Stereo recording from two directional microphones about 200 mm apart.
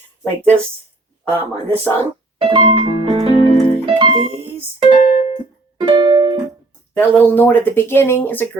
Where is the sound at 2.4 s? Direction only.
30° right (ahead or behind).